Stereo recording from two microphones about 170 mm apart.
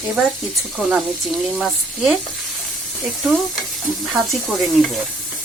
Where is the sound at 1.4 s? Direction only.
Centre (ahead or behind).